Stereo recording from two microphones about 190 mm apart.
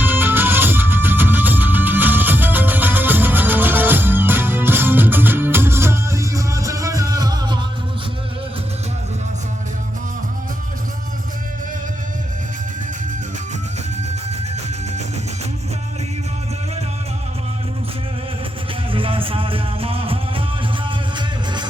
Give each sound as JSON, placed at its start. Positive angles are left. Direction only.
{"t": 0.0, "sound": "music", "side_deg": -10}
{"t": 18.9, "sound": "music", "side_deg": -30}